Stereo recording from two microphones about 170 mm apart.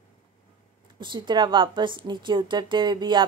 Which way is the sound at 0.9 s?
25° right (ahead or behind).